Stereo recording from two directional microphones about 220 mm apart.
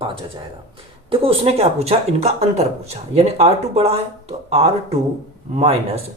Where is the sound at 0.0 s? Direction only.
25° right (ahead or behind).